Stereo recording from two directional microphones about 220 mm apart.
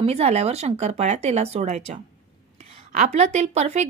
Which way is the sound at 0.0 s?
30° right (ahead or behind).